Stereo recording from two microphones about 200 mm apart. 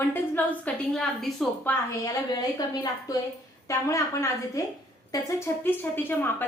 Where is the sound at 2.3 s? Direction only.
20° left (ahead or behind).